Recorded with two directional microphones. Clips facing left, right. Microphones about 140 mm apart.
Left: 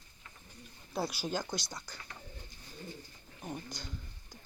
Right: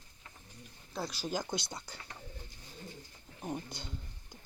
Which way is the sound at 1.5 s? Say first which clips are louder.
Right 1 dB; 25° right (ahead or behind).